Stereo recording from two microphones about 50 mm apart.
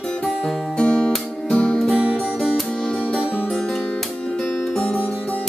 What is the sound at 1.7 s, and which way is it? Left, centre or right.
Music, centre.